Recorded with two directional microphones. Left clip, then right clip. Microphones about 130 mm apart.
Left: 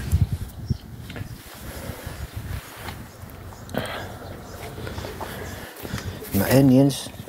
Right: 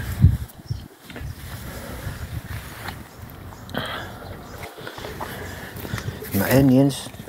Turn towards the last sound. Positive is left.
turn(degrees=0)  # may be behind; listen again after turning